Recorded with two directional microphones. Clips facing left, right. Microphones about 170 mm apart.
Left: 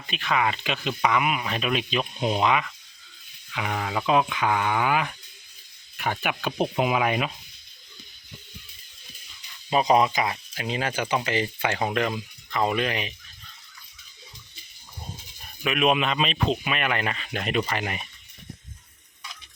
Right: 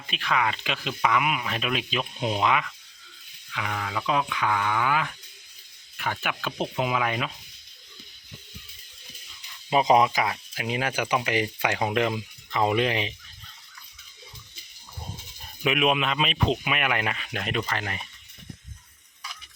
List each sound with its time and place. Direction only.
0.1 s speech: centre (ahead or behind)
3.5 s speech: 25° left (ahead or behind)
9.6 s speech: 15° right (ahead or behind)
15.8 s speech: centre (ahead or behind)